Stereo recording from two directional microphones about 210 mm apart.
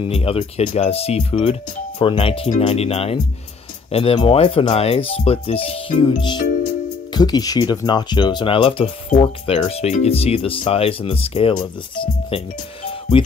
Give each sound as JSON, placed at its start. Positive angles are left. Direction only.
{"t": 0.0, "sound": "speech", "side_deg": 25}